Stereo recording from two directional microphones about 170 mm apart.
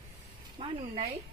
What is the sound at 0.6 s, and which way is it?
Speech, 40° right (ahead or behind).